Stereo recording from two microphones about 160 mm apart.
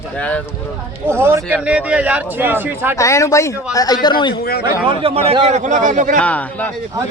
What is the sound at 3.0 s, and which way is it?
Speech, 20° left (ahead or behind).